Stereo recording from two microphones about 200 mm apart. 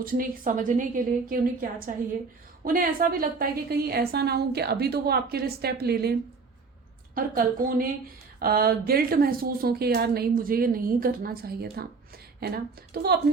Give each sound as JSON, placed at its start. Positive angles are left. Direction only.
{"t": 0.0, "sound": "a woman's voice", "side_deg": -45}
{"t": 2.6, "sound": "a woman's voice", "side_deg": -45}